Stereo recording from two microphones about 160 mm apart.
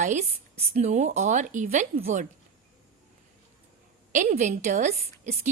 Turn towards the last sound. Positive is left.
turn(degrees=-45)  # may be behind; listen again after turning